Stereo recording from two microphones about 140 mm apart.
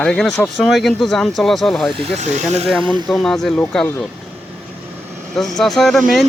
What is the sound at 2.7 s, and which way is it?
Speech, 35° right (ahead or behind).